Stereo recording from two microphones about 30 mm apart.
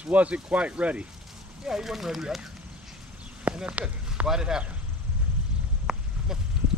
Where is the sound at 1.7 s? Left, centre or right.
Centre.